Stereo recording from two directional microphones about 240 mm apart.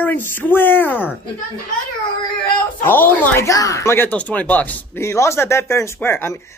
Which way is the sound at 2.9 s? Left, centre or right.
Centre.